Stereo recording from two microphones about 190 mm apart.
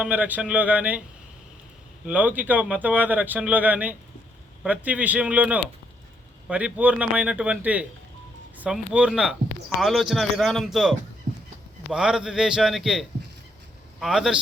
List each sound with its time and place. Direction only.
0.0 s speech: 10° right (ahead or behind)
2.0 s speech: 10° right (ahead or behind)